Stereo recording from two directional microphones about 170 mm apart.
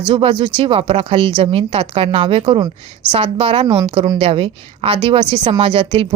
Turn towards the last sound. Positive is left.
turn(degrees=-30)  # may be behind; listen again after turning